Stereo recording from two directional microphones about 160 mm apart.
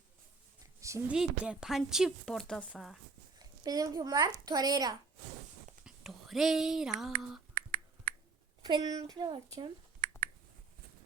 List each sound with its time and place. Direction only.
1.0 s a woman's voice: 5° right (ahead or behind)
3.3 s a woman's voice: 25° right (ahead or behind)
5.8 s a woman's voice: centre (ahead or behind)
7.5 s finger snapping: 60° right (ahead or behind)
8.6 s a woman's voice: 25° right (ahead or behind)